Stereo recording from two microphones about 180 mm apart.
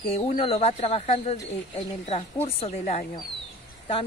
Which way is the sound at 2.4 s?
35° left (ahead or behind).